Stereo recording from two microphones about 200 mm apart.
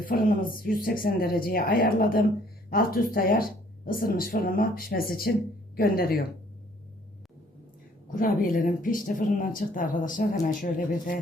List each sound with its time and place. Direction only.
0.1 s speech: 45° left (ahead or behind)
8.1 s speech: 45° left (ahead or behind)